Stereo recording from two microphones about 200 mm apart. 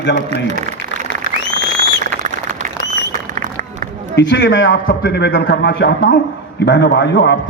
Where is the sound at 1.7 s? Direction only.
40° right (ahead or behind).